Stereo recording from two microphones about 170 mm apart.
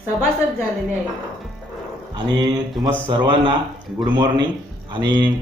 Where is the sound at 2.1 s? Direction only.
25° right (ahead or behind).